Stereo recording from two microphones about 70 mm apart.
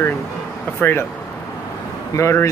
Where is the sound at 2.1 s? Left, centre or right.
Left.